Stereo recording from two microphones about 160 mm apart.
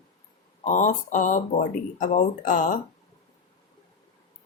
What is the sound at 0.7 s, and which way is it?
Speech, 50° left (ahead or behind).